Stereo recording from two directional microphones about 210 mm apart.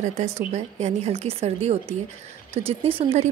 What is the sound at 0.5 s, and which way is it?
A woman's voice, 30° right (ahead or behind).